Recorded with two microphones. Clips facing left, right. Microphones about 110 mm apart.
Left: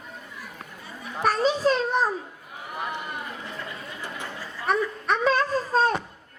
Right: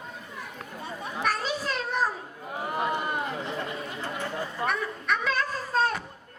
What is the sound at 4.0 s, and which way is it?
Chatter, 20° right (ahead or behind).